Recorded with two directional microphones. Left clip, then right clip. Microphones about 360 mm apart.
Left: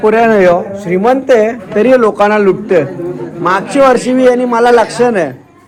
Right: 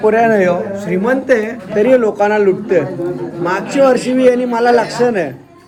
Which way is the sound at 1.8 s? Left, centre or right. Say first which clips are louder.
Left 2 dB; left.